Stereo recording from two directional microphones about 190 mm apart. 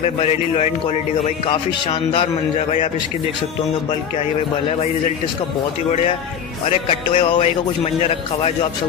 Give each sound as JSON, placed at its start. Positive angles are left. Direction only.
{"t": 0.0, "sound": "a man's voice", "side_deg": 35}
{"t": 6.6, "sound": "a man's voice", "side_deg": 30}